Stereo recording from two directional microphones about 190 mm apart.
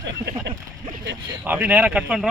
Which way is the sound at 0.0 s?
70° right (ahead or behind).